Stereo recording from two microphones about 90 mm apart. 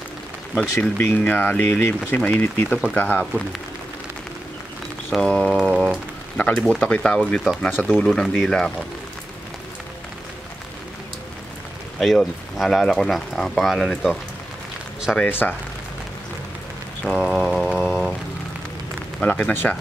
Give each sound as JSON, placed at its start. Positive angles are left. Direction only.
{"t": 0.6, "sound": "speech", "side_deg": 15}
{"t": 5.1, "sound": "speech", "side_deg": 10}
{"t": 5.5, "sound": "a sound", "side_deg": -5}
{"t": 6.3, "sound": "speech", "side_deg": 15}
{"t": 7.7, "sound": "speech", "side_deg": 20}
{"t": 8.0, "sound": "speech", "side_deg": 10}
{"t": 12.0, "sound": "speech", "side_deg": 0}
{"t": 15.2, "sound": "speech", "side_deg": 20}
{"t": 17.1, "sound": "mantra", "side_deg": -15}
{"t": 17.7, "sound": "a sound", "side_deg": 0}
{"t": 19.2, "sound": "speech", "side_deg": 15}